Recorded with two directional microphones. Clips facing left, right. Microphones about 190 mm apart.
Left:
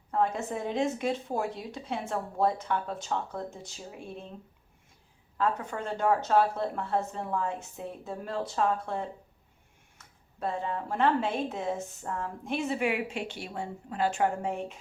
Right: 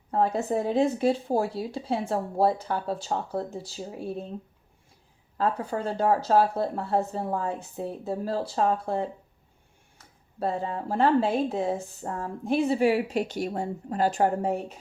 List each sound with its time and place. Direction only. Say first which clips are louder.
0.1 s speech: right 4 dB; 35° right (ahead or behind)
5.4 s speech: right 3 dB; 35° right (ahead or behind)